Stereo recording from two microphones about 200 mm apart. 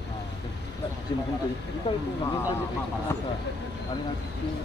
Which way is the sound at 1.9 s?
25° left (ahead or behind).